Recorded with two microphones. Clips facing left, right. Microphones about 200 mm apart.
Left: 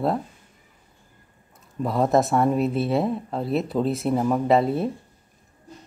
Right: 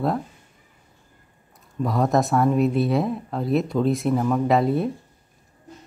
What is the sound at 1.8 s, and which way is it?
Speech, centre (ahead or behind).